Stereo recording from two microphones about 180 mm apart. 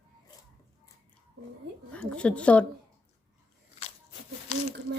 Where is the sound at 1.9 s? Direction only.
5° left (ahead or behind).